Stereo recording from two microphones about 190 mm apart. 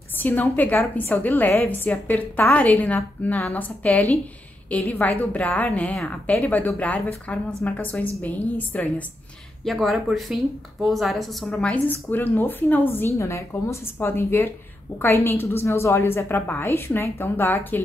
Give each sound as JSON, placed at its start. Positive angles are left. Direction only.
{"t": 0.2, "sound": "speech", "side_deg": 10}